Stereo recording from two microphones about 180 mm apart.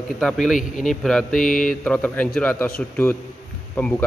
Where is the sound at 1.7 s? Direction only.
5° left (ahead or behind).